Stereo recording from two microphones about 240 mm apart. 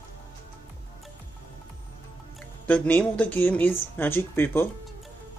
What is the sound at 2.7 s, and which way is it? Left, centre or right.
Speech, centre.